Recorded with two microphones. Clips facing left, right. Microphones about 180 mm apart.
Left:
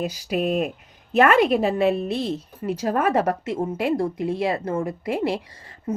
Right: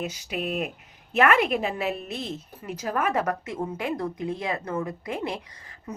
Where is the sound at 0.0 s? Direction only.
40° left (ahead or behind).